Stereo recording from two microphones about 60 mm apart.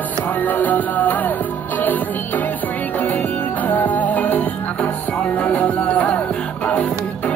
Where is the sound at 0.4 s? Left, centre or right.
Left.